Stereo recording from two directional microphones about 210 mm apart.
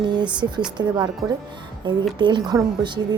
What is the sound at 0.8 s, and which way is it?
Speech, 20° right (ahead or behind).